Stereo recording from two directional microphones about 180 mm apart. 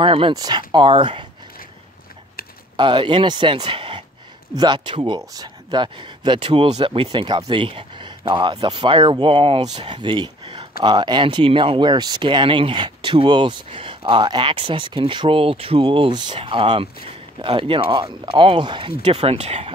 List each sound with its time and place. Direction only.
0.0 s speech: 30° right (ahead or behind)
2.8 s speech: 25° right (ahead or behind)